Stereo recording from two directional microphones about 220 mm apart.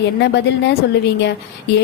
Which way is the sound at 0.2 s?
50° left (ahead or behind).